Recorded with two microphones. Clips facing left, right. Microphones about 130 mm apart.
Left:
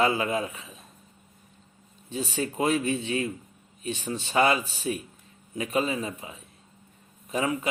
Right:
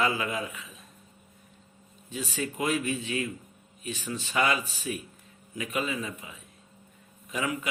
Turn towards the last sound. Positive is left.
turn(degrees=30)  # may be behind; listen again after turning